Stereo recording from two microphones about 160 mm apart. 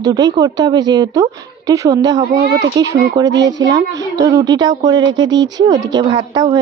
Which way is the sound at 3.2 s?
90° right.